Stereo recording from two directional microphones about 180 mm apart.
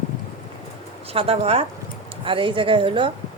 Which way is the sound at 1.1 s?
35° right (ahead or behind).